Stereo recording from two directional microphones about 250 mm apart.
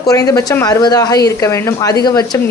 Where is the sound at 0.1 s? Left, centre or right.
Centre.